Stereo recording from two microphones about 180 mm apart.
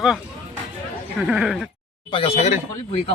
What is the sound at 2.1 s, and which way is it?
Speech, 30° left (ahead or behind).